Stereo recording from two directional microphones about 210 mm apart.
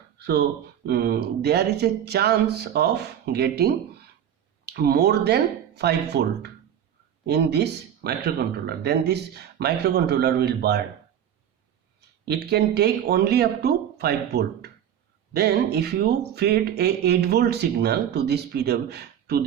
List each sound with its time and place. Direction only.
0.9 s speech: 50° right (ahead or behind)
11.9 s speech: 50° right (ahead or behind)